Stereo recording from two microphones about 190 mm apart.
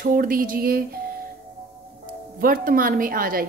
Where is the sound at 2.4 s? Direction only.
50° right (ahead or behind).